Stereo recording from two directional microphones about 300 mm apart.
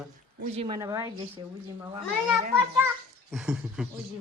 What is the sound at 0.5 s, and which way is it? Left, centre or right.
Speech, centre.